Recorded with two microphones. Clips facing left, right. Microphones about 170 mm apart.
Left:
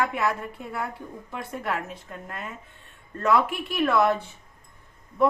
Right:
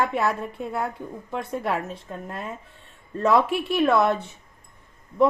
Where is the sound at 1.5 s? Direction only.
30° right (ahead or behind).